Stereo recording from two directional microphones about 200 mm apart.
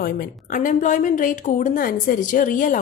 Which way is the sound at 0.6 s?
40° left (ahead or behind).